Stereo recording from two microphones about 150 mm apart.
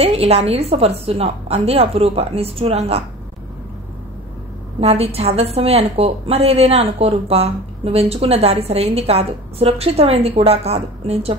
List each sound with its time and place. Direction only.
0.0 s a woman's voice: 45° right (ahead or behind)
4.7 s a woman's voice: 40° right (ahead or behind)